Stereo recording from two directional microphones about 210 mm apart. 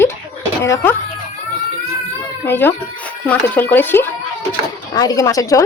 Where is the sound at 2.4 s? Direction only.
10° left (ahead or behind).